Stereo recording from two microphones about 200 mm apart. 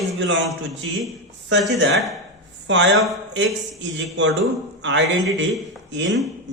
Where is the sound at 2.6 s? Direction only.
65° right (ahead or behind).